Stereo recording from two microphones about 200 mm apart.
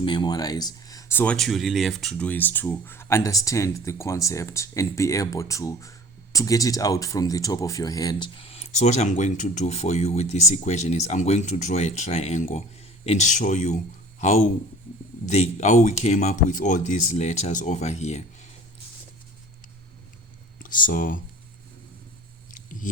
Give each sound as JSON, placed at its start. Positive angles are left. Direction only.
{"t": 0.0, "sound": "speech", "side_deg": 20}
{"t": 20.6, "sound": "speech", "side_deg": 45}
{"t": 22.5, "sound": "a sound", "side_deg": 40}